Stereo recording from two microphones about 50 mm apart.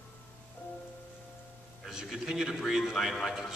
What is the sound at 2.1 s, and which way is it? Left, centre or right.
A man's voice, centre.